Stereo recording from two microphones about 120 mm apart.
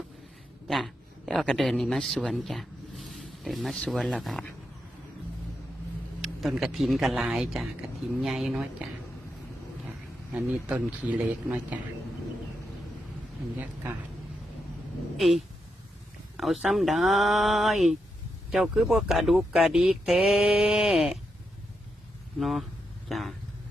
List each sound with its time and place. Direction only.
0.7 s speech: centre (ahead or behind)
6.2 s speech: 5° right (ahead or behind)
10.3 s speech: 10° right (ahead or behind)
16.4 s speech: centre (ahead or behind)
22.4 s speech: centre (ahead or behind)
23.0 s a sound: centre (ahead or behind)